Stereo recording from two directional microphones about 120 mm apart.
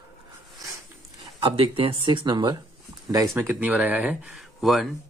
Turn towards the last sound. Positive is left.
turn(degrees=0)  # may be behind; listen again after turning